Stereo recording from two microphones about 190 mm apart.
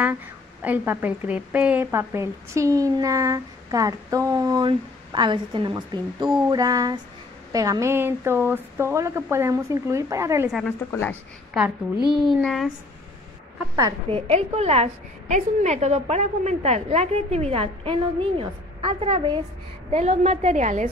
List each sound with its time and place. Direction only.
0.0 s a woman's voice: 10° right (ahead or behind)
6.5 s a sound: 20° right (ahead or behind)
7.5 s a woman's voice: 20° right (ahead or behind)
10.9 s speech: 10° left (ahead or behind)
12.3 s speech: centre (ahead or behind)
13.7 s a sound: 20° right (ahead or behind)
14.2 s a woman's voice: 35° right (ahead or behind)